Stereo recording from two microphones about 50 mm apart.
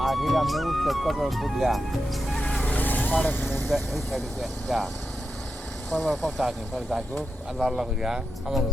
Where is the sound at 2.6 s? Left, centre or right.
Left.